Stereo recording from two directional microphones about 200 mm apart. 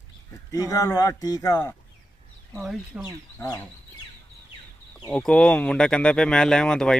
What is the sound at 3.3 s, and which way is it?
Speech, 15° left (ahead or behind).